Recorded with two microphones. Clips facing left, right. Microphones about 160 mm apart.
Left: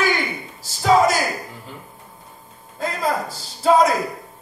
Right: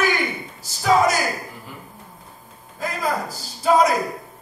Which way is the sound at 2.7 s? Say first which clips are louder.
Left 2 dB; 25° left (ahead or behind).